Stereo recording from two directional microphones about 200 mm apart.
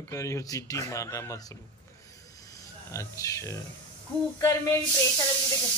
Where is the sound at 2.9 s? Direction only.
15° left (ahead or behind).